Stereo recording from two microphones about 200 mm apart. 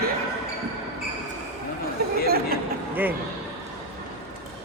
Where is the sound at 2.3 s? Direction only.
50° right (ahead or behind).